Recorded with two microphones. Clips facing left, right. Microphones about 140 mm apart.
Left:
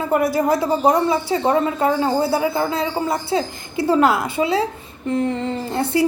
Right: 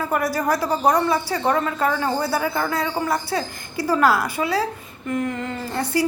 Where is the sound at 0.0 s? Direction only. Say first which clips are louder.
Left 4 dB; 25° left (ahead or behind).